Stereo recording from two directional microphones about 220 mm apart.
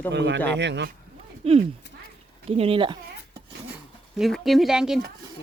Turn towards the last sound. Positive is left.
turn(degrees=-5)  # may be behind; listen again after turning